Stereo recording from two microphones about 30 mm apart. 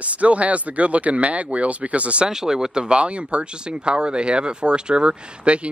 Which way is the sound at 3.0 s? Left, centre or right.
Right.